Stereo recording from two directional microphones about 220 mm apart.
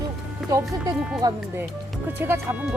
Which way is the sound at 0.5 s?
15° right (ahead or behind).